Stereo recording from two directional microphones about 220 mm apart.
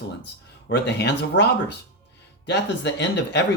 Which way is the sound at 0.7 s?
50° left (ahead or behind).